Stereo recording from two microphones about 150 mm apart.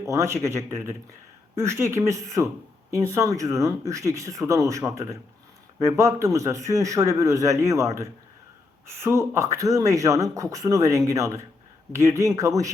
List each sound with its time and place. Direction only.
0.0 s speech: 20° right (ahead or behind)